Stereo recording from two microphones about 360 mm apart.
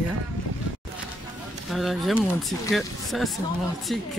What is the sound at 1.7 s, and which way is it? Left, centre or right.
Speech, centre.